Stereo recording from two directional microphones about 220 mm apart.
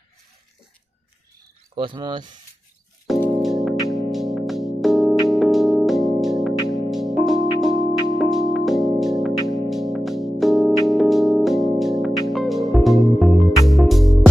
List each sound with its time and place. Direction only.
1.8 s speech: 20° right (ahead or behind)
3.1 s music: centre (ahead or behind)